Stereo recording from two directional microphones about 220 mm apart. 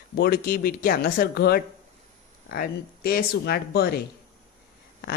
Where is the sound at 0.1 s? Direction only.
45° left (ahead or behind).